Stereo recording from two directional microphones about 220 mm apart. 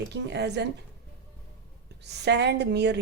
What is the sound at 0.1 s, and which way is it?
Speech, 50° right (ahead or behind).